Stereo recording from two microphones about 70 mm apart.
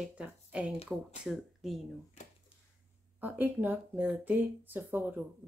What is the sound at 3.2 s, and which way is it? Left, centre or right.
Speech, right.